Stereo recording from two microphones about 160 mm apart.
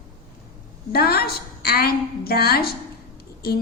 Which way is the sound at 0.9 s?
75° left (ahead or behind).